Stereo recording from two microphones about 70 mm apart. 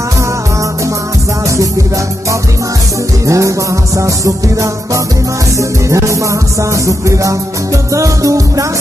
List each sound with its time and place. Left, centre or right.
3.3 s music: right